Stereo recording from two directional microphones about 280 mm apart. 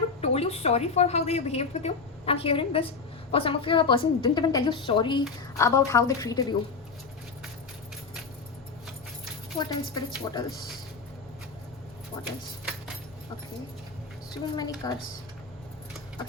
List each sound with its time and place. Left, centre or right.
0.2 s a woman's voice: left
9.6 s a woman's voice: centre
12.1 s keys jangling: centre
14.8 s a woman's voice: centre